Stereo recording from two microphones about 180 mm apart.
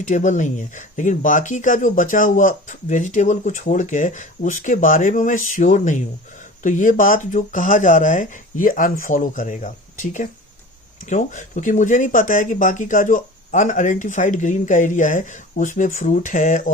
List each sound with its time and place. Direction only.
0.0 s speech: 45° left (ahead or behind)